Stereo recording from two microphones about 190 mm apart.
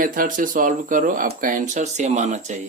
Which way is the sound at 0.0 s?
45° right (ahead or behind).